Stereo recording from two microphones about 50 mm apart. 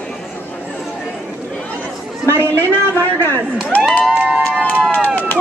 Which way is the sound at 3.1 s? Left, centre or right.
Left.